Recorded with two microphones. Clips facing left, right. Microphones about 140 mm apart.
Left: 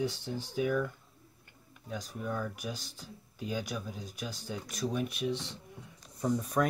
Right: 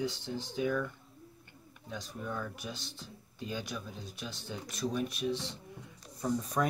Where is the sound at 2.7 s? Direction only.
40° left (ahead or behind).